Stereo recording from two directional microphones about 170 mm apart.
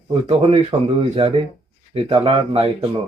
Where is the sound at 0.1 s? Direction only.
30° right (ahead or behind).